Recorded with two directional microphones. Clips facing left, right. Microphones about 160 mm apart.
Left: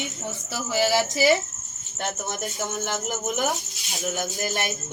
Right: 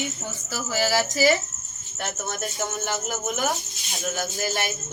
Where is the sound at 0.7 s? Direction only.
20° left (ahead or behind).